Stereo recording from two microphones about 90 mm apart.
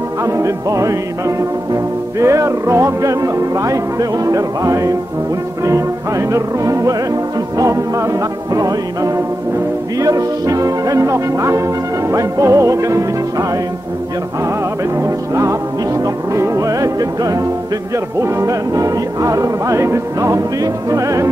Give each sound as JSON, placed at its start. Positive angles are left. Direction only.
{"t": 0.2, "sound": "music", "side_deg": -35}
{"t": 15.0, "sound": "music", "side_deg": -35}